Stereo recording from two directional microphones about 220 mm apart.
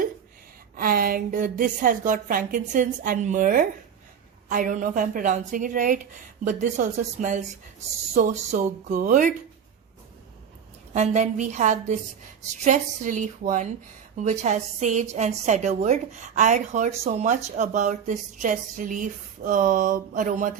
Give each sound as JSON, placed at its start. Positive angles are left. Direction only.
{"t": 0.8, "sound": "a woman's voice", "side_deg": -40}
{"t": 10.9, "sound": "a woman's voice", "side_deg": -30}